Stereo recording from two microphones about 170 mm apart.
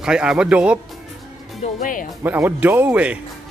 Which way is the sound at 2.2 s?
10° right (ahead or behind).